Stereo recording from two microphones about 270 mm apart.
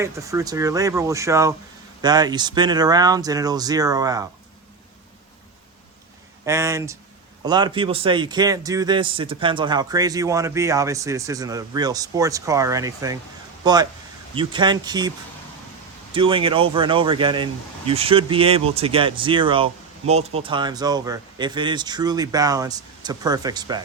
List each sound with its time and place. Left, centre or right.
0.0 s speech: centre
6.4 s speech: centre
16.1 s speech: centre